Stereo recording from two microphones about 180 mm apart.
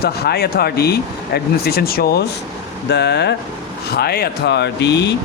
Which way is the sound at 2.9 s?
70° left (ahead or behind).